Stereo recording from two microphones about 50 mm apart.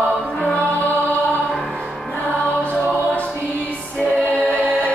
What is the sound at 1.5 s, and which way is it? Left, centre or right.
Music, centre.